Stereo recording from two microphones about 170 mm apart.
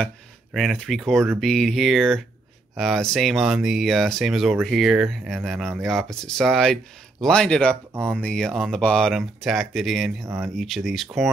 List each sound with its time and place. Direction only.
0.0 s speech: centre (ahead or behind)
10.2 s speech: 15° right (ahead or behind)
10.5 s speech: centre (ahead or behind)